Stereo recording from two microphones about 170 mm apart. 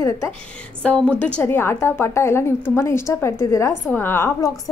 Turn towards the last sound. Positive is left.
turn(degrees=15)  # may be behind; listen again after turning